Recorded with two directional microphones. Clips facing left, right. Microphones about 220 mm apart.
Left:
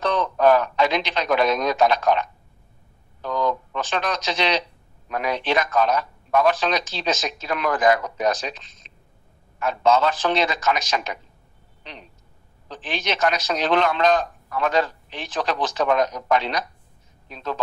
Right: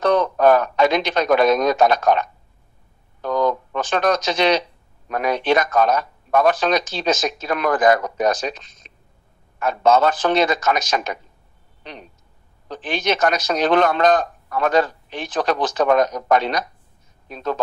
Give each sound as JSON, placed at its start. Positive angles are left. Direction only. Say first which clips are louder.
{"t": 0.0, "sound": "a man's voice", "louder": "right 4 dB", "side_deg": -50}